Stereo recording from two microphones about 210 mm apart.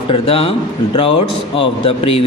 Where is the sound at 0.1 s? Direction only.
25° left (ahead or behind).